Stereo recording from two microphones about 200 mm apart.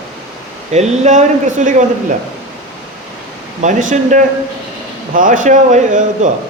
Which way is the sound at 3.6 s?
40° right (ahead or behind).